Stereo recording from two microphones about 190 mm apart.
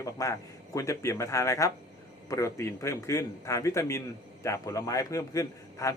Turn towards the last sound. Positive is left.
turn(degrees=15)  # may be behind; listen again after turning